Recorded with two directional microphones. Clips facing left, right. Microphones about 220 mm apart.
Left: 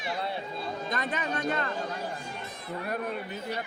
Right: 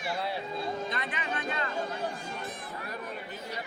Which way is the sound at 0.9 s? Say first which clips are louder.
Left 4 dB; 45° left (ahead or behind).